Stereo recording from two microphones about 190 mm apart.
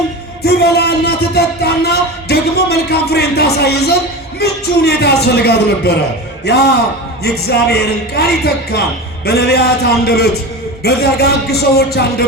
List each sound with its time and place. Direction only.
0.4 s speech: 60° left (ahead or behind)